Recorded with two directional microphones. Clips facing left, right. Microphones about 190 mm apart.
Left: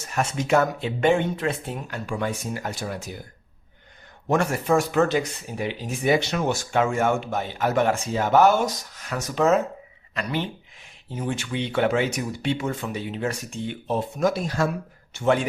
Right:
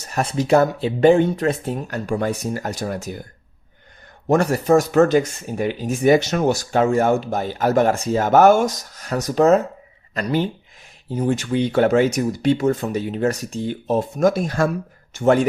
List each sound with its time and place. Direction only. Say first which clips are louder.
0.0 s speech: right 4 dB; 35° right (ahead or behind)
4.3 s speech: right 6 dB; 40° right (ahead or behind)